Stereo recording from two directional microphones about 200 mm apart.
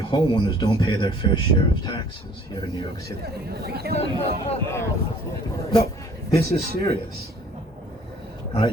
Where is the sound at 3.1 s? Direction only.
50° right (ahead or behind).